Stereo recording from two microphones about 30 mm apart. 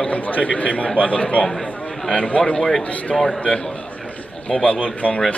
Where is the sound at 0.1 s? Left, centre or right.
Left.